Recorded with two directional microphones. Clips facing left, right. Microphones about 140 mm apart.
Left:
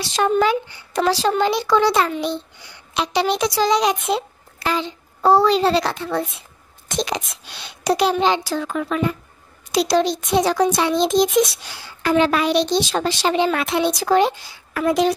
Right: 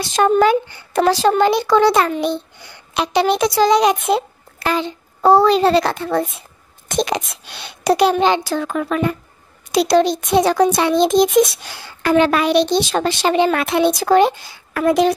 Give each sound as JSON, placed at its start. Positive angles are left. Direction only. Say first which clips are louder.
{"t": 0.0, "sound": "a child's voice", "louder": "right 4 dB", "side_deg": -50}